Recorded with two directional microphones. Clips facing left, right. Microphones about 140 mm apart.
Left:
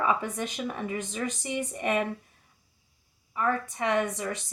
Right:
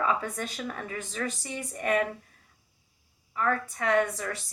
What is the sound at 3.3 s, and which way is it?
Speech, 20° left (ahead or behind).